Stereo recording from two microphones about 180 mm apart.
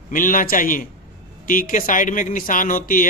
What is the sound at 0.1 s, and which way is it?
A man's voice, 50° left (ahead or behind).